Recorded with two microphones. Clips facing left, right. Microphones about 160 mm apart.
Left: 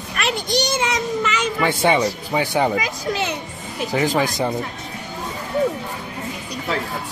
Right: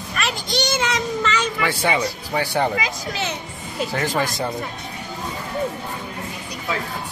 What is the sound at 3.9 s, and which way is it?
Speech, 15° left (ahead or behind).